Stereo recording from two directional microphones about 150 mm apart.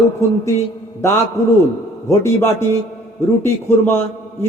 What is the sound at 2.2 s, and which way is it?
A man's voice, 15° left (ahead or behind).